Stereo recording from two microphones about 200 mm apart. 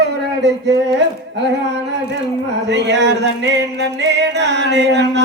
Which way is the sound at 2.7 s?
60° right (ahead or behind).